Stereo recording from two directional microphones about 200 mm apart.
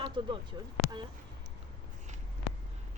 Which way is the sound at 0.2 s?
25° right (ahead or behind).